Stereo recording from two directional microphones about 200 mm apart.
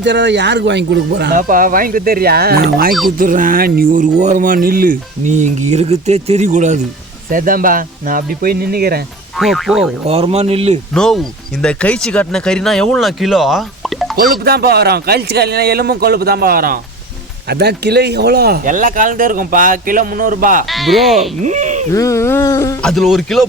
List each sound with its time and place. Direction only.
0.0 s speech: 60° right (ahead or behind)
1.4 s speech: 45° right (ahead or behind)
9.4 s speech: centre (ahead or behind)
10.1 s speech: 30° right (ahead or behind)
10.9 s speech: centre (ahead or behind)
14.2 s speech: 50° right (ahead or behind)
20.7 s speech: centre (ahead or behind)
21.4 s speech: 35° right (ahead or behind)
21.9 s speech: 15° left (ahead or behind)
22.8 s speech: centre (ahead or behind)